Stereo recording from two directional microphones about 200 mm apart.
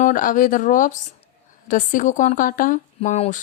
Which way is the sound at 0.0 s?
40° left (ahead or behind).